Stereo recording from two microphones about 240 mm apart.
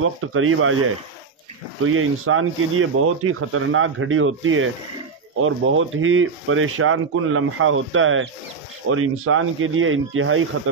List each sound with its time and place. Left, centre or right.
0.0 s speech: right
1.9 s speech: right